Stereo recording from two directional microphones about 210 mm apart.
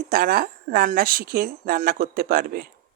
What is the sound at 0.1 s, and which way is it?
Speech, 45° right (ahead or behind).